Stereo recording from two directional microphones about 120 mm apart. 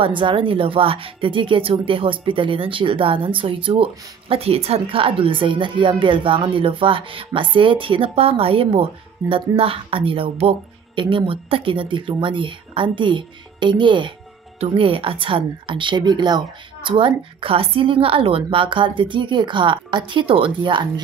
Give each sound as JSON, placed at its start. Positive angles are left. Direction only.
{"t": 0.0, "sound": "speech", "side_deg": -45}